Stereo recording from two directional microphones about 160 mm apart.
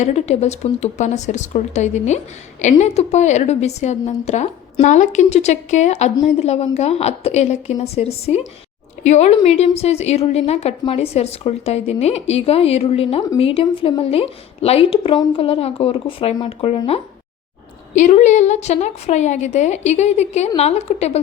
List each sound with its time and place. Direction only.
0.0 s a woman's voice: 45° left (ahead or behind)
17.9 s a woman's voice: 45° left (ahead or behind)